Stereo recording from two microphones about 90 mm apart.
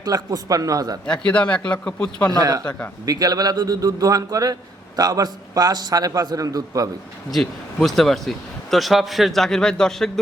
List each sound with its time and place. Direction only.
0.0 s a man's voice: 45° right (ahead or behind)
1.0 s a man's voice: 10° left (ahead or behind)
2.3 s a man's voice: 45° right (ahead or behind)
2.6 s a man's voice: 15° left (ahead or behind)
3.1 s a man's voice: 45° right (ahead or behind)
7.3 s a man's voice: 5° left (ahead or behind)